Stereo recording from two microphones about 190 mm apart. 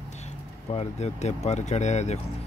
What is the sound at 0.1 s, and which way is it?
Speech, 35° left (ahead or behind).